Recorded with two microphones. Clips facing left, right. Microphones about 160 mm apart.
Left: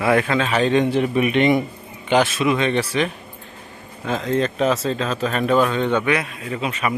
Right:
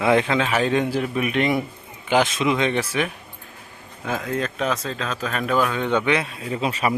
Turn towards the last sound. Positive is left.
turn(degrees=-35)  # may be behind; listen again after turning